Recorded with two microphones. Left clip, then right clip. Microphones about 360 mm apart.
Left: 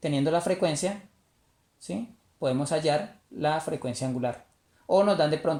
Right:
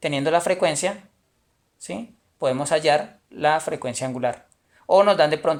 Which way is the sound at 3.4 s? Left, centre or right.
Right.